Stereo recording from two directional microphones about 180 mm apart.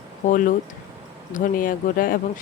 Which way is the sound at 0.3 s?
50° left (ahead or behind).